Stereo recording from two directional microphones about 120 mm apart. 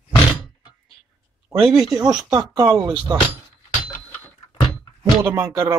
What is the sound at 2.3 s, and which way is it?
Speech, 30° right (ahead or behind).